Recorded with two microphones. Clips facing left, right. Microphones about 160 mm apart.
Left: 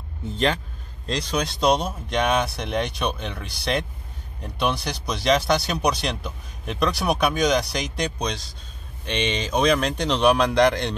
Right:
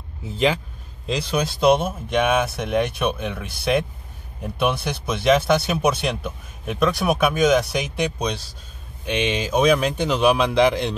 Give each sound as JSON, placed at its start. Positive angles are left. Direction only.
{"t": 0.2, "sound": "speech", "side_deg": -5}